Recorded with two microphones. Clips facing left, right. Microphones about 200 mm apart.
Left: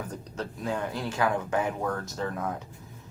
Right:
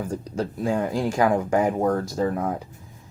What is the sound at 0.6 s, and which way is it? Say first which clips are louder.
Speech: right 7 dB; 40° right (ahead or behind).